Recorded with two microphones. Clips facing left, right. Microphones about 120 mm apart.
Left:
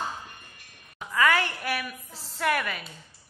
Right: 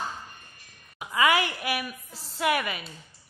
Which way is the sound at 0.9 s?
10° right (ahead or behind).